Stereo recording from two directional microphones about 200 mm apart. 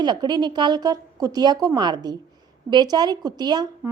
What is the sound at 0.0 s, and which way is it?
A woman's voice, 20° right (ahead or behind).